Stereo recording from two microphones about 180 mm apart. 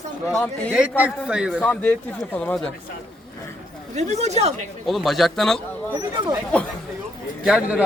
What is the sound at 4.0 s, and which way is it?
Speech, 40° right (ahead or behind).